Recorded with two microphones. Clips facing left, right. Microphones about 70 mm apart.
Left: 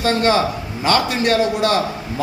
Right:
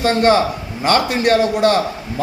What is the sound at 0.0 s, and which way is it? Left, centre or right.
A man's voice, right.